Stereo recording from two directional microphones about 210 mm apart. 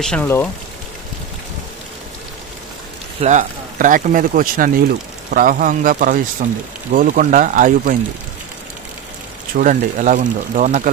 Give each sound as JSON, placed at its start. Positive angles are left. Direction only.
{"t": 0.0, "sound": "speech", "side_deg": 5}
{"t": 3.2, "sound": "speech", "side_deg": -35}
{"t": 9.6, "sound": "speech", "side_deg": -40}